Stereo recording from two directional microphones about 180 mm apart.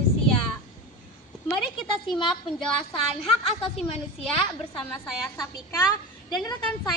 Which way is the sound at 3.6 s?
5° left (ahead or behind).